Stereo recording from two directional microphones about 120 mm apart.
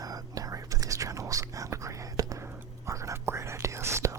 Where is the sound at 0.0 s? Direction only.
30° right (ahead or behind).